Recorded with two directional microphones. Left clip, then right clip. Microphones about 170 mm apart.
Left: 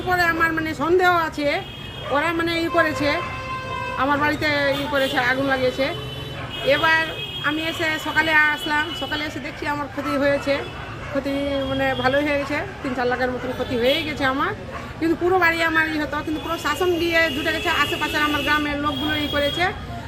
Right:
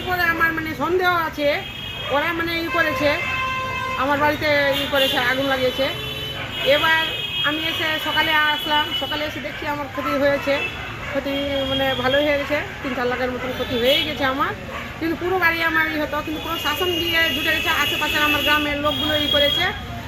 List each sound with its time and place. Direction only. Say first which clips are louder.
0.1 s a sound: even; 25° left (ahead or behind)
2.1 s a woman's voice: left 1 dB; 30° left (ahead or behind)
11.8 s a woman's voice: right 1 dB; 20° left (ahead or behind)